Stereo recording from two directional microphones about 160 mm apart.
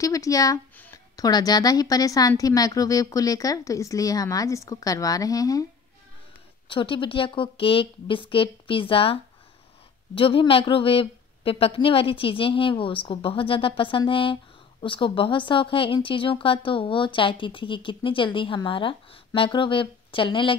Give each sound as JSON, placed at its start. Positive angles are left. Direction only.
{"t": 0.0, "sound": "speech", "side_deg": 20}
{"t": 6.7, "sound": "speech", "side_deg": 30}